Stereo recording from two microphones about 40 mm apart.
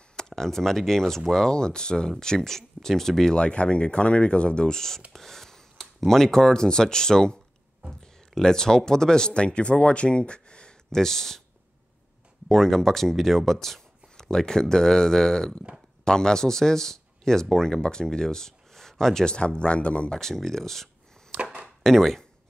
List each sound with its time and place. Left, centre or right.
0.4 s speech: centre
3.3 s speech: left
4.7 s speech: centre
8.4 s speech: centre
12.4 s speech: centre; by 20.2 s left
20.2 s speech: centre
21.4 s chop: right
21.8 s speech: centre